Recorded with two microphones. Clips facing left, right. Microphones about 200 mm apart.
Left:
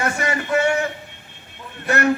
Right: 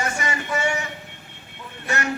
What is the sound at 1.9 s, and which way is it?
Speech, 55° left (ahead or behind).